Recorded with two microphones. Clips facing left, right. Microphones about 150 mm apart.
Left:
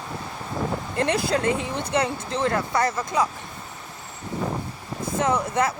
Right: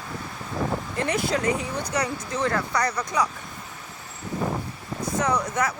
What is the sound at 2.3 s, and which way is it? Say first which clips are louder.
Speech: left 2 dB; 25° left (ahead or behind).